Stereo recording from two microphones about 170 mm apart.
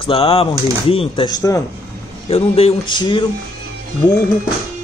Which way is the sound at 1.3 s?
20° left (ahead or behind).